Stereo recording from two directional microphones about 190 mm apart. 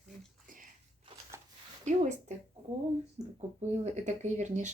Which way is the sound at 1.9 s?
40° right (ahead or behind).